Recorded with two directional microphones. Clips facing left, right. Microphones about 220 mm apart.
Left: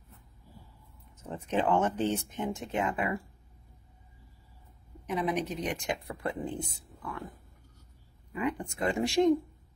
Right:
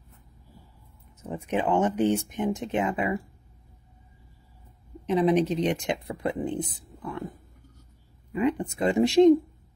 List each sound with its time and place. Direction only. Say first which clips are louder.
1.3 s speech: right 2 dB; 15° right (ahead or behind)
5.0 s speech: right 9 dB; 25° right (ahead or behind)
8.3 s speech: right 7 dB; 25° right (ahead or behind)